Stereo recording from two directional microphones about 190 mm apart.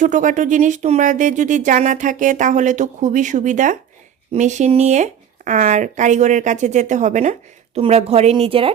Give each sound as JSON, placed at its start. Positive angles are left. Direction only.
{"t": 0.0, "sound": "speech", "side_deg": -40}